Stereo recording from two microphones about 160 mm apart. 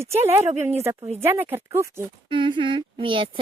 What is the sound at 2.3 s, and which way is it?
Speech, 30° right (ahead or behind).